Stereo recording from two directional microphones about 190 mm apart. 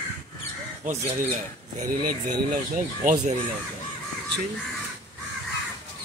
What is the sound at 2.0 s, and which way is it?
Speech, 50° right (ahead or behind).